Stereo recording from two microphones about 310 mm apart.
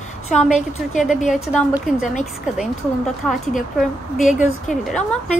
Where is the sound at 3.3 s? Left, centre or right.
Centre.